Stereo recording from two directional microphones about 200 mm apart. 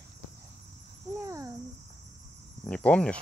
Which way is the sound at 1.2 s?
15° right (ahead or behind).